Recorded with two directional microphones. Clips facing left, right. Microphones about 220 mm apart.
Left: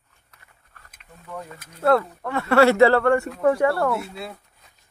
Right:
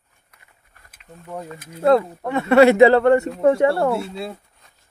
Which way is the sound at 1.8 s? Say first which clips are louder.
Right 3 dB; 20° right (ahead or behind).